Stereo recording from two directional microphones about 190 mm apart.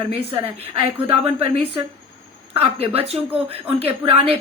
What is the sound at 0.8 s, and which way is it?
A woman's voice, 30° right (ahead or behind).